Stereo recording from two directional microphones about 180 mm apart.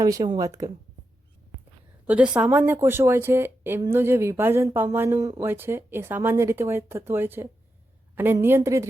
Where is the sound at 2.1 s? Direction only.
5° right (ahead or behind).